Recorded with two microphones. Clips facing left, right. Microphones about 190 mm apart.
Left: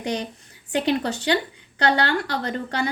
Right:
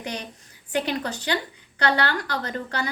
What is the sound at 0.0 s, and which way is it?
A woman's voice, 25° left (ahead or behind).